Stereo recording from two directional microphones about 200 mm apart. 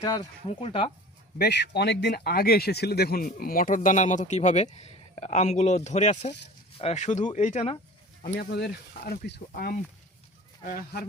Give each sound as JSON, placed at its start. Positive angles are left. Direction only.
{"t": 0.0, "sound": "speech", "side_deg": 20}
{"t": 1.4, "sound": "speech", "side_deg": 55}
{"t": 8.2, "sound": "speech", "side_deg": 50}